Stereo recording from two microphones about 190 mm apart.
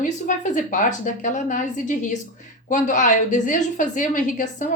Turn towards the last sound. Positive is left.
turn(degrees=40)  # may be behind; listen again after turning